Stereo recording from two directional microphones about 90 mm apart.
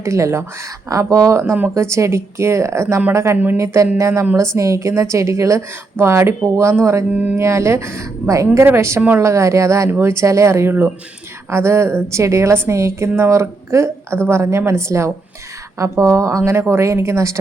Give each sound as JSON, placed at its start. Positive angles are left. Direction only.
{"t": 0.0, "sound": "a woman's voice", "side_deg": -30}
{"t": 3.3, "sound": "speech", "side_deg": -20}
{"t": 3.6, "sound": "a woman's voice", "side_deg": -35}
{"t": 7.1, "sound": "speech", "side_deg": -15}
{"t": 7.3, "sound": "a woman's voice", "side_deg": -30}
{"t": 9.0, "sound": "speech", "side_deg": -20}
{"t": 9.2, "sound": "a woman's voice", "side_deg": -35}